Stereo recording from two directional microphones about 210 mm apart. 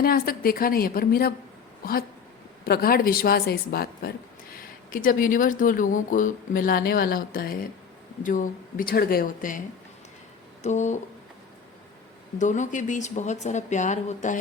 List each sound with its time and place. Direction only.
0.0 s a woman's voice: 45° left (ahead or behind)
12.4 s speech: 35° left (ahead or behind)